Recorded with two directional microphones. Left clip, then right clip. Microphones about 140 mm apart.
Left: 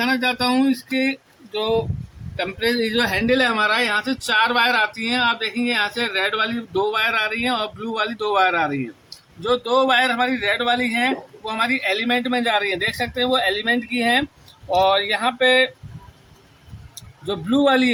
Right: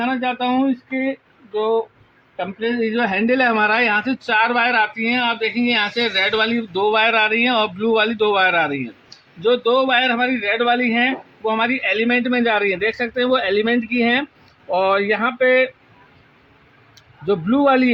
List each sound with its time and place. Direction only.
0.0 s speech: 25° right (ahead or behind)
2.3 s speech: 25° right (ahead or behind)
6.1 s a man's voice: 50° right (ahead or behind)
9.4 s a man's voice: 35° right (ahead or behind)
16.9 s a man's voice: 40° right (ahead or behind)